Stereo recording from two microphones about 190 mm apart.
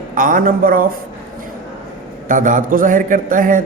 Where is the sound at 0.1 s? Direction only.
45° right (ahead or behind).